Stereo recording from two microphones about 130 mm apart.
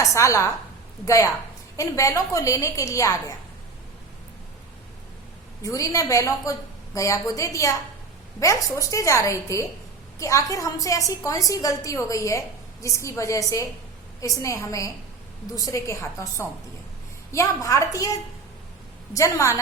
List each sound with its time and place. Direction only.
0.0 s a woman's voice: 25° left (ahead or behind)
5.6 s a woman's voice: 25° left (ahead or behind)